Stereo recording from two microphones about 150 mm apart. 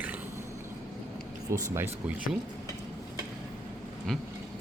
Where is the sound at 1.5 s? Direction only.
15° right (ahead or behind).